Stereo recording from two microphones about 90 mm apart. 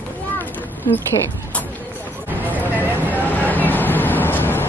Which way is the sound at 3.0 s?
20° left (ahead or behind).